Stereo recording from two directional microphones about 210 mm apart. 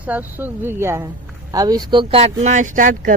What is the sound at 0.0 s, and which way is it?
Speech, 10° right (ahead or behind).